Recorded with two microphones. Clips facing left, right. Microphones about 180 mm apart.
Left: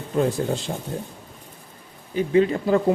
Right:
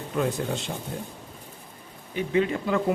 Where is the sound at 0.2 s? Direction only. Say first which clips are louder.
Left 5 dB; 35° left (ahead or behind).